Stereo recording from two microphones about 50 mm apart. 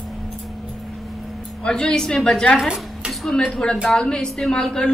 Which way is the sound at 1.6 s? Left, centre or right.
Centre.